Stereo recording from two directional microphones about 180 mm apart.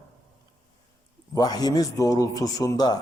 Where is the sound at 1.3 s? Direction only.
20° left (ahead or behind).